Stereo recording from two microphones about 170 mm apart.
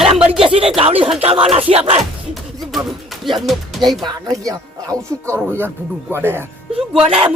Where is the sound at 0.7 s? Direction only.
35° right (ahead or behind).